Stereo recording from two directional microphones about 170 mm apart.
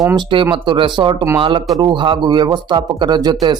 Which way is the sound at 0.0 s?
20° right (ahead or behind).